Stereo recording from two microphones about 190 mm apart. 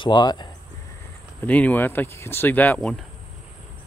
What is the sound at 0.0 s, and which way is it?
Speech, 20° left (ahead or behind).